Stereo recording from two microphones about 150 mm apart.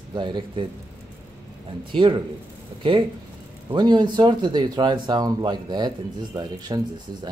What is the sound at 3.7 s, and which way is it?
Speech, 30° right (ahead or behind).